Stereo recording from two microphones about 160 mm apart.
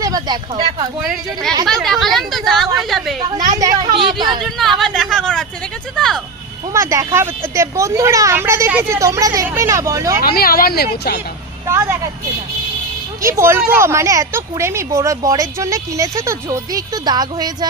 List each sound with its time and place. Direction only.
0.0 s speech: 25° right (ahead or behind)
1.0 s speech: centre (ahead or behind)
3.6 s speech: 20° right (ahead or behind)
4.4 s speech: centre (ahead or behind)
6.0 s a sound: 5° left (ahead or behind)
6.7 s speech: 15° right (ahead or behind)
10.2 s speech: 70° left (ahead or behind)
11.7 s a woman's voice: 15° right (ahead or behind)
13.2 s speech: 15° right (ahead or behind)